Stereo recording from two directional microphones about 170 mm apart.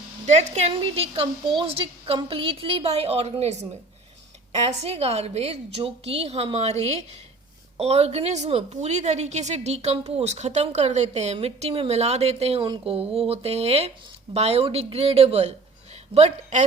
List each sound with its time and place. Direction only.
0.3 s a woman's voice: 40° right (ahead or behind)
4.7 s a woman's voice: 40° right (ahead or behind)